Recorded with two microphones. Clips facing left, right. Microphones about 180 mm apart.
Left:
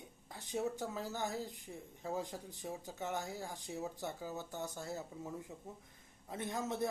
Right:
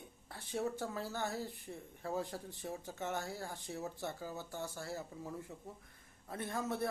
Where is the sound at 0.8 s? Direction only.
15° left (ahead or behind).